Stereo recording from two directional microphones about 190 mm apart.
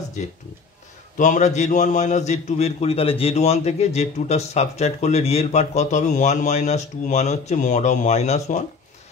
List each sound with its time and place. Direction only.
1.1 s a man's voice: 40° left (ahead or behind)